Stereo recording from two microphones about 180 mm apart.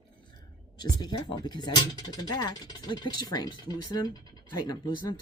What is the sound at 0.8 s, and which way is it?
Speech, 25° left (ahead or behind).